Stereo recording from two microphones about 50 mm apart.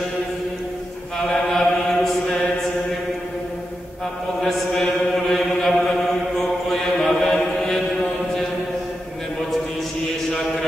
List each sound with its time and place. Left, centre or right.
1.1 s chant: centre
4.4 s chant: centre
6.3 s mantra: centre